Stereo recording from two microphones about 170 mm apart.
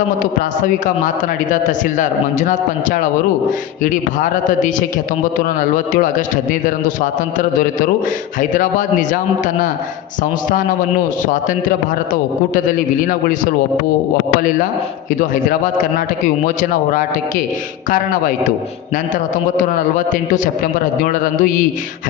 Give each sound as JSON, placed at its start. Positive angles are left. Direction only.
{"t": 1.0, "sound": "a man's voice", "side_deg": 50}
{"t": 4.2, "sound": "a man's voice", "side_deg": 50}
{"t": 12.6, "sound": "a man's voice", "side_deg": 50}
{"t": 15.2, "sound": "a man's voice", "side_deg": 50}
{"t": 19.1, "sound": "a man's voice", "side_deg": 50}